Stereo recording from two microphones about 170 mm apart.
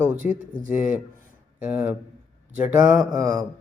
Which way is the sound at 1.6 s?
10° right (ahead or behind).